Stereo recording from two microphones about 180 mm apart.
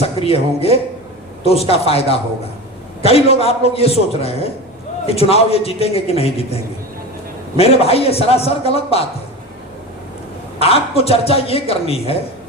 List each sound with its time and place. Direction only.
0.0 s a man's voice: 35° left (ahead or behind)
10.6 s a man's voice: 35° left (ahead or behind)